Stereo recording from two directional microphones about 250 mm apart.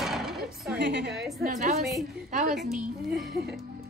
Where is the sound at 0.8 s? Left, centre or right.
Right.